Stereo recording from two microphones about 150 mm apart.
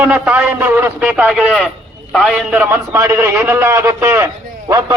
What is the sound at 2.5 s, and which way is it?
A man's voice, 15° right (ahead or behind).